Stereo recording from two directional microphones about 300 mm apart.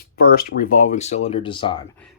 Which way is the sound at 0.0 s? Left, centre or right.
Left.